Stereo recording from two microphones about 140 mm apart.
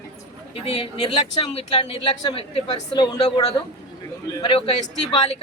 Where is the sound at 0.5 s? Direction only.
40° left (ahead or behind).